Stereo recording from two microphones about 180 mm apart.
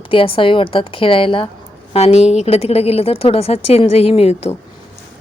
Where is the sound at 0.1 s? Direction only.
30° left (ahead or behind).